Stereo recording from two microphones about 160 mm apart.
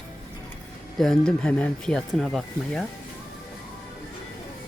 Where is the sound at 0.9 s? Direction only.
Centre (ahead or behind).